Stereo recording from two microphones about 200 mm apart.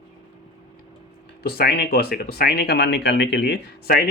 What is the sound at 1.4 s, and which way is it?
Speech, 50° left (ahead or behind).